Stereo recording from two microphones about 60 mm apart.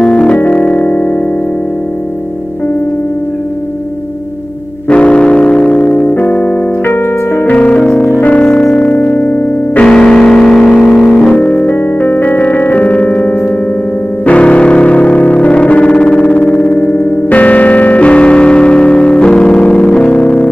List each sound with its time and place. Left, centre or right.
0.0 s music: centre
4.8 s keyboard: centre; by 7.5 s left
7.5 s music: centre
8.9 s music: left
9.8 s music: centre
11.3 s music: left
16.0 s synthesizer: centre
16.6 s music: left